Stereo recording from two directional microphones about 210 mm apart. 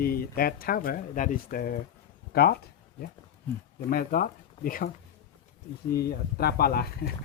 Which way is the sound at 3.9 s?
45° left (ahead or behind).